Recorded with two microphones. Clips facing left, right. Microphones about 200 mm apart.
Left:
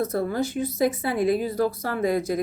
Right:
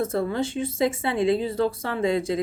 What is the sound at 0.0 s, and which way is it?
Speech, 25° right (ahead or behind).